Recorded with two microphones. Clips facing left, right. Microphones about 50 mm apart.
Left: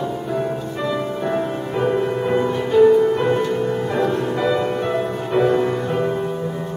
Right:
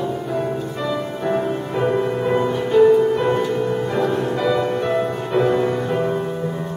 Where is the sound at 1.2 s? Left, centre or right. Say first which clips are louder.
Right 4 dB; centre.